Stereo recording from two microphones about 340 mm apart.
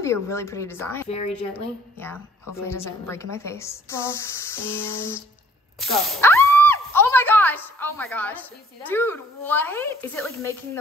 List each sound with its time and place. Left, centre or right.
0.0 s a woman's voice: centre
1.0 s speech: centre
2.0 s a woman's voice: centre